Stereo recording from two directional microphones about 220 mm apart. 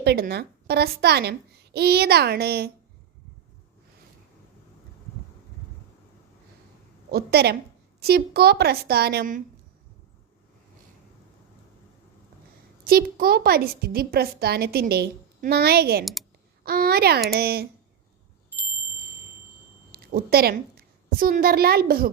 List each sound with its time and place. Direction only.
0.0 s a woman's voice: 50° right (ahead or behind)
7.1 s a woman's voice: 45° right (ahead or behind)
12.8 s a woman's voice: 45° right (ahead or behind)
19.9 s a woman's voice: 40° right (ahead or behind)